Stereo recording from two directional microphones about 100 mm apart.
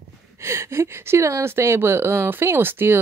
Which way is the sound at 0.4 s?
25° right (ahead or behind).